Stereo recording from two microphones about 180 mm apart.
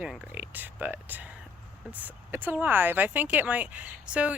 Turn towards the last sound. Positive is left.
turn(degrees=-5)  # may be behind; listen again after turning